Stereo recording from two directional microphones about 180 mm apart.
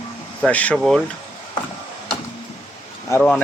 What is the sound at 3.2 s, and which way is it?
Speech, 5° left (ahead or behind).